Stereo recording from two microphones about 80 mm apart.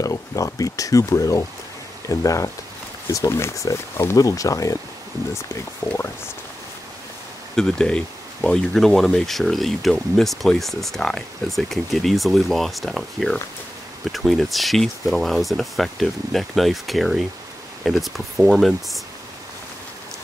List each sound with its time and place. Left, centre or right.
0.0 s speech: left
4.2 s speech: left
7.5 s speech: centre